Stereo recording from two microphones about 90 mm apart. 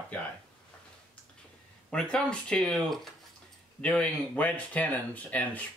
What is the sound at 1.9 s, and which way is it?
Speech, 10° left (ahead or behind).